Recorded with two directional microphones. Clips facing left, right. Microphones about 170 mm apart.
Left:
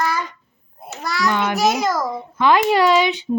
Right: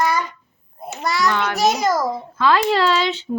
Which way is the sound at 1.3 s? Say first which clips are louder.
Left 1 dB; 15° left (ahead or behind).